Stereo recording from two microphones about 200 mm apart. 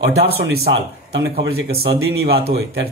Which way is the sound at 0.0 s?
50° right (ahead or behind).